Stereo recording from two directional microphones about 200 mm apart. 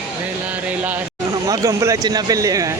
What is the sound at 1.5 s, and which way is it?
Speech, 15° right (ahead or behind).